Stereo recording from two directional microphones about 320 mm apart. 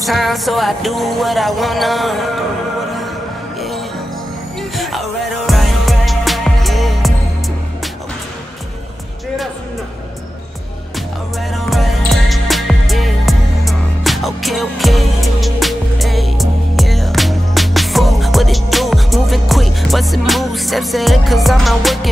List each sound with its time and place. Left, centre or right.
0.0 s music: centre
3.5 s music: centre
11.5 s music: centre